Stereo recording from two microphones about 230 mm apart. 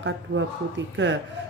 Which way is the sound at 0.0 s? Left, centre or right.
Right.